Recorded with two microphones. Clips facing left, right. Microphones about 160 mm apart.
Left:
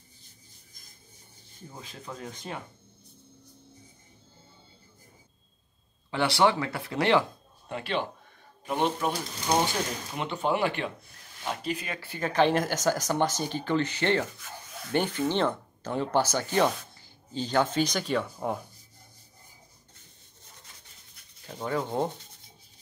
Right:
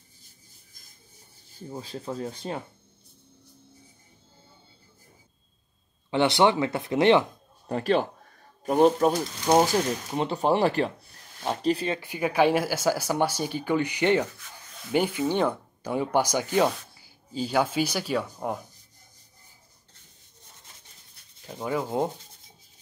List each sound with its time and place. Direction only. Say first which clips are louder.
1.7 s speech: right 8 dB; 30° right (ahead or behind)
6.0 s speech: right 3 dB; 20° right (ahead or behind)
7.6 s speech: right 7 dB; 40° right (ahead or behind)
12.0 s speech: left 2 dB; 15° right (ahead or behind)
21.5 s speech: right 2 dB; 10° right (ahead or behind)